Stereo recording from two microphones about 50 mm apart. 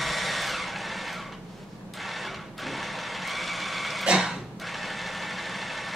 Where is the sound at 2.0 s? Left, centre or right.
Centre.